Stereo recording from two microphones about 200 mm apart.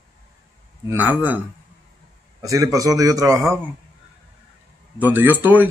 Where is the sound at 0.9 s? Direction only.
10° right (ahead or behind).